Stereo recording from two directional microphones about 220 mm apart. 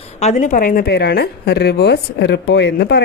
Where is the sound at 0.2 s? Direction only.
35° left (ahead or behind).